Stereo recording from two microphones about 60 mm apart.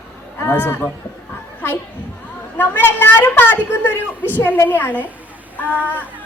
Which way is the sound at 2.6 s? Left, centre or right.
Left.